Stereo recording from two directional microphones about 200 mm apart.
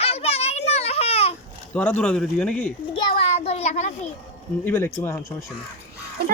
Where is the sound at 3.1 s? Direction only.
30° left (ahead or behind).